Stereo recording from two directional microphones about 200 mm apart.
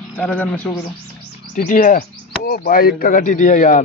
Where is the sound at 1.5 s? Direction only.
40° left (ahead or behind).